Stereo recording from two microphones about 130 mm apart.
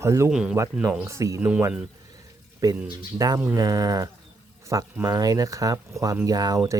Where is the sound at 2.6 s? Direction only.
30° right (ahead or behind).